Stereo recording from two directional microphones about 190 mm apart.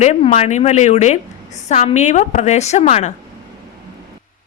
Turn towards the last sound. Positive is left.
turn(degrees=35)  # may be behind; listen again after turning